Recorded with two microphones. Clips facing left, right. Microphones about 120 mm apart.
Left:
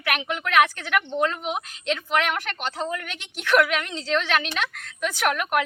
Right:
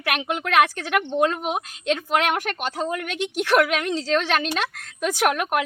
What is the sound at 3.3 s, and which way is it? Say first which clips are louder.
A woman's voice: right 1 dB; 40° right (ahead or behind).